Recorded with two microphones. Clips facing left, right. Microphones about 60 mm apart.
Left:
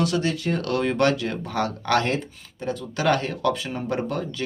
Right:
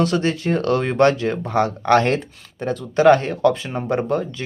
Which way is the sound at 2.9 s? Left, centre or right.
Right.